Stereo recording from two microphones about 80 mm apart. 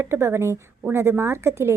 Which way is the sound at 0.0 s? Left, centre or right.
Right.